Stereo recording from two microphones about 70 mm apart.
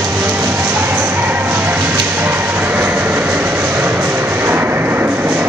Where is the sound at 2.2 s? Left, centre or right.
Right.